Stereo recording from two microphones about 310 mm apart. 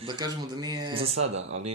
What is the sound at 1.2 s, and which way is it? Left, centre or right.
Speech, right.